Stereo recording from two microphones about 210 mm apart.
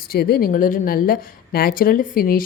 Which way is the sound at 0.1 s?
45° left (ahead or behind).